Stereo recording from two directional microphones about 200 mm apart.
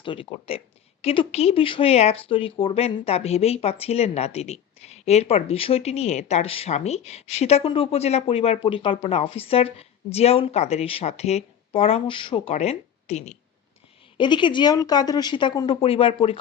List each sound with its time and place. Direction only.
0.0 s a woman's voice: 25° left (ahead or behind)